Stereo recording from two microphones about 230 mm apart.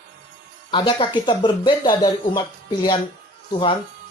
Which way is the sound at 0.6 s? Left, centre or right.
Left.